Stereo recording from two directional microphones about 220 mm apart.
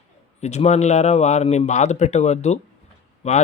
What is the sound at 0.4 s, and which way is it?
Speech, 30° left (ahead or behind).